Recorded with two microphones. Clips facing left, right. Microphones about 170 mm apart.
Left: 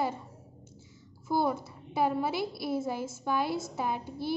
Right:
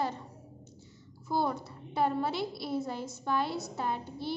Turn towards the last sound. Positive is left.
turn(degrees=10)  # may be behind; listen again after turning